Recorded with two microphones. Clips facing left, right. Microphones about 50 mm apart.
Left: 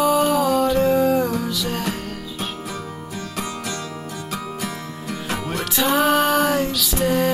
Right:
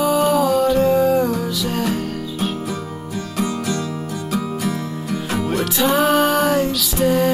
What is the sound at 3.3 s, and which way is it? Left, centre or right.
Music, left.